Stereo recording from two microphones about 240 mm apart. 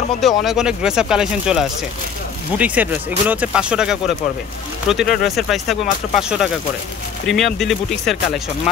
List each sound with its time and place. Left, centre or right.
0.4 s speech: centre